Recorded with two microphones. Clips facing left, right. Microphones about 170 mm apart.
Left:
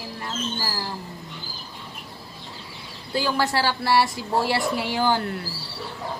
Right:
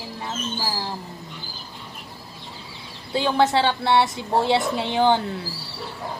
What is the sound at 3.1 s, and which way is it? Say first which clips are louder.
Speech: right 4 dB; 20° right (ahead or behind).